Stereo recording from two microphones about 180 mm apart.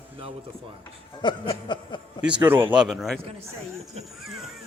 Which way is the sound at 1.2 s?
25° left (ahead or behind).